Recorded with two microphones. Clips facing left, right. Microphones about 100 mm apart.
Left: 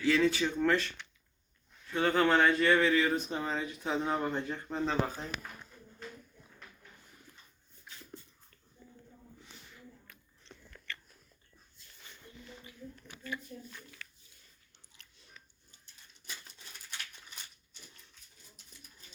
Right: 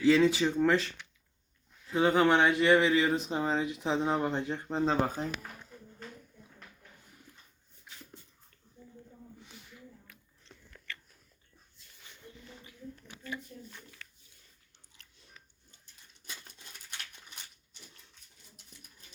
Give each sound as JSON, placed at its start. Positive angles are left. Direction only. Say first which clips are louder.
{"t": 0.0, "sound": "speech", "louder": "right 4 dB", "side_deg": -25}
{"t": 2.0, "sound": "speech", "louder": "right 2 dB", "side_deg": -20}
{"t": 5.0, "sound": "speech", "louder": "right 5 dB", "side_deg": -50}
{"t": 10.1, "sound": "biting", "louder": "left 1 dB", "side_deg": -5}
{"t": 13.0, "sound": "a sound", "louder": "left 1 dB", "side_deg": -25}